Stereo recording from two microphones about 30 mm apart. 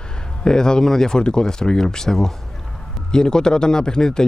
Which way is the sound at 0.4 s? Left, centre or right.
Left.